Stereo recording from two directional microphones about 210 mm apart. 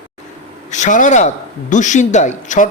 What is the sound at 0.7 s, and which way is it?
A man's voice, 35° left (ahead or behind).